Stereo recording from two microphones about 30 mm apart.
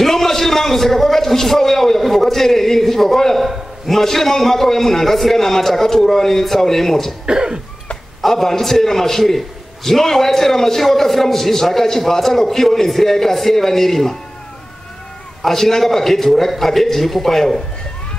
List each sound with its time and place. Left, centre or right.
0.0 s a sound: centre
3.4 s a man's voice: centre
7.2 s cough: right
8.2 s a man's voice: centre
15.4 s a man's voice: centre